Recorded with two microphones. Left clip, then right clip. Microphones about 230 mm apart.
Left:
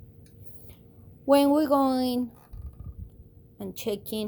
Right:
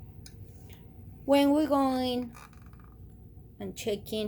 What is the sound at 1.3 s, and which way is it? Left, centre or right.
Speech, left.